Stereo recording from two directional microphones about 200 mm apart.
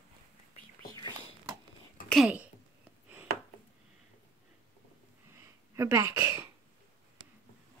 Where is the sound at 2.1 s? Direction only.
5° right (ahead or behind).